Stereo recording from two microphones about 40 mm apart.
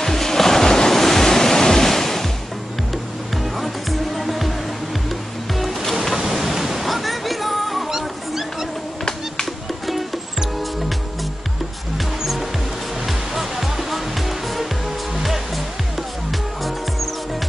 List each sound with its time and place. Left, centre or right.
0.0 s waves: centre
3.5 s music: centre
6.1 s a sound: centre
8.0 s dog: centre
12.2 s music: centre